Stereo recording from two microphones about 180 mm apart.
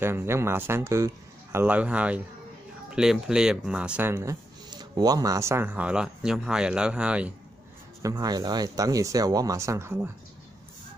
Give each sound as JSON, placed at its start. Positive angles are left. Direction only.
{"t": 0.0, "sound": "speech", "side_deg": -15}
{"t": 8.0, "sound": "speech", "side_deg": -20}